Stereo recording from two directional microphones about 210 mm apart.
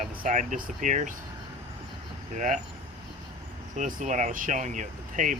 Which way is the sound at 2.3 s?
35° right (ahead or behind).